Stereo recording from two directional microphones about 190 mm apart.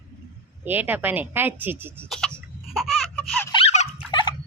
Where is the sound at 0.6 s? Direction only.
10° right (ahead or behind).